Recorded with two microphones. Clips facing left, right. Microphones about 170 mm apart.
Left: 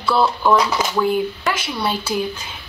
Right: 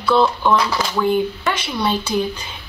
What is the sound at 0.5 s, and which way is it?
Speech, 20° left (ahead or behind).